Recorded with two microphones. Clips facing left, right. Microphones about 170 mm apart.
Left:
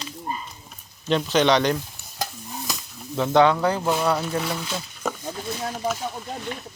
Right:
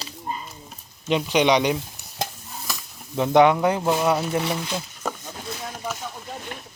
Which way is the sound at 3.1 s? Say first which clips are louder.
Right 1 dB; 20° right (ahead or behind).